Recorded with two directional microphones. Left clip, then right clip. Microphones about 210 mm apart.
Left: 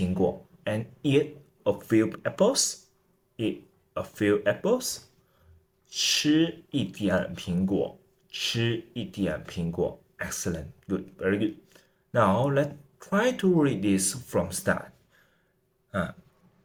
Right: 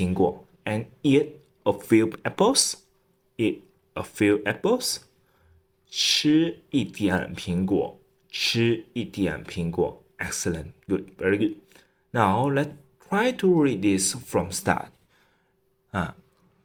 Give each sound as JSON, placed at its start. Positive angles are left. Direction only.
{"t": 0.0, "sound": "speech", "side_deg": -30}
{"t": 3.9, "sound": "speech", "side_deg": -30}
{"t": 15.9, "sound": "throat clearing", "side_deg": -35}